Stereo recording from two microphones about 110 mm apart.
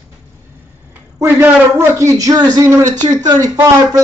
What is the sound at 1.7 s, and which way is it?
Speech, 25° right (ahead or behind).